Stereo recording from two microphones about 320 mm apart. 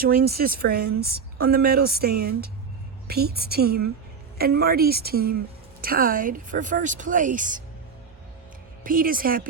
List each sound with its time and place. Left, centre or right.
0.0 s speech: right
8.8 s speech: right